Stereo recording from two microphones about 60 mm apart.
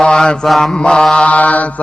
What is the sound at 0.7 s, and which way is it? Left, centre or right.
Mantra, centre.